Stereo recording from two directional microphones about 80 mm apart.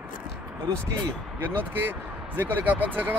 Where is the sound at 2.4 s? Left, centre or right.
Right.